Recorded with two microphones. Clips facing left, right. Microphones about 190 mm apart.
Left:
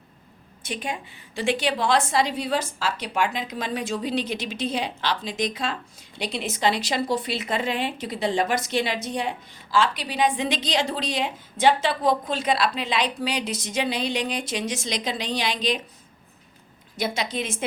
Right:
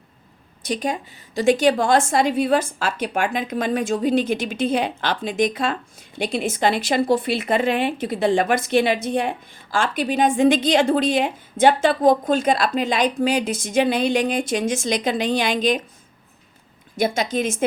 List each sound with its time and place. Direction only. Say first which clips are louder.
0.6 s a woman's voice: right 7 dB; 40° right (ahead or behind)
17.0 s a woman's voice: right 6 dB; 45° right (ahead or behind)